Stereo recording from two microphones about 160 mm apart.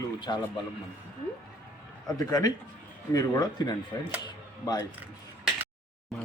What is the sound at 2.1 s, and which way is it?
A man's voice, 25° left (ahead or behind).